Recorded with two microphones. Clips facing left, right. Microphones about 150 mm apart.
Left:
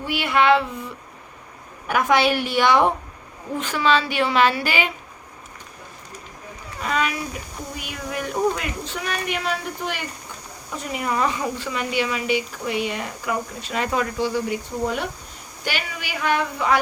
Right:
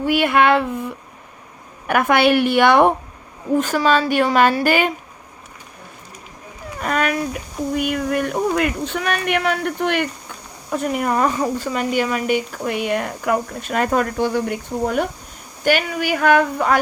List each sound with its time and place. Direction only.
0.0 s speech: 50° right (ahead or behind)
1.9 s speech: 55° right (ahead or behind)
3.6 s speech: 45° right (ahead or behind)
6.8 s a sound: 50° right (ahead or behind)
7.8 s speech: 60° right (ahead or behind)
10.7 s speech: 50° right (ahead or behind)